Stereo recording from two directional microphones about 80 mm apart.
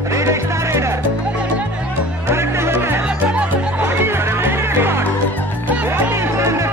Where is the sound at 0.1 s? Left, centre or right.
Right.